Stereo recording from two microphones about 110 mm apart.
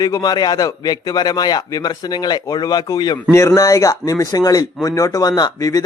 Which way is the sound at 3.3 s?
25° left (ahead or behind).